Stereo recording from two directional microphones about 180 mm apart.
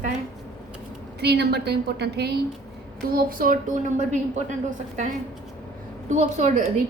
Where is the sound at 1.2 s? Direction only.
65° right (ahead or behind).